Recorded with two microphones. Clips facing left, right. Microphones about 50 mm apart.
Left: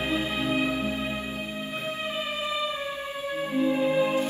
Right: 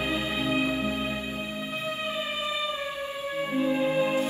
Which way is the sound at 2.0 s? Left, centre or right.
Left.